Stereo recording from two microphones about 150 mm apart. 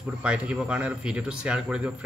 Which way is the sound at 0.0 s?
10° right (ahead or behind).